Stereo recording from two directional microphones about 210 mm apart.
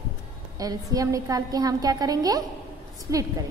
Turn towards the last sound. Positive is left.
turn(degrees=-15)  # may be behind; listen again after turning